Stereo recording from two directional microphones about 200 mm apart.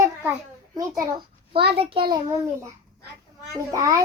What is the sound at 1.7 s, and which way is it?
Speech, 25° right (ahead or behind).